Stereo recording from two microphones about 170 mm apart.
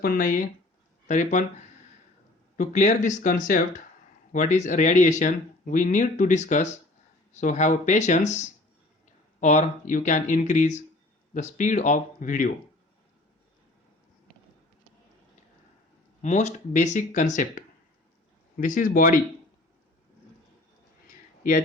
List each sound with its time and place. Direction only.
0.0 s speech: 55° left (ahead or behind)
2.6 s speech: 45° left (ahead or behind)
16.2 s speech: 45° left (ahead or behind)